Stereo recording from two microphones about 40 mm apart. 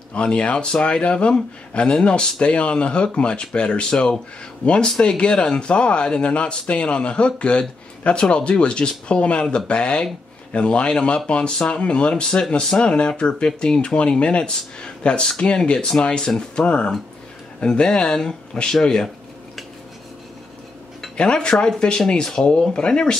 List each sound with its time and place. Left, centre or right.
0.1 s speech: left
21.2 s speech: left